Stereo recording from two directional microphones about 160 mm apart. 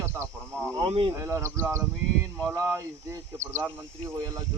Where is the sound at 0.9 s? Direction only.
35° right (ahead or behind).